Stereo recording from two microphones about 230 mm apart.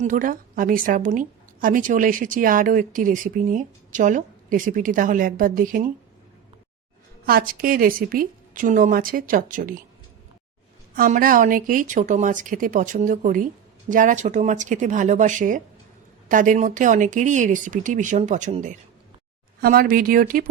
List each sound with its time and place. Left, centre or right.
0.0 s a woman's voice: right
7.3 s a woman's voice: right
10.9 s a woman's voice: right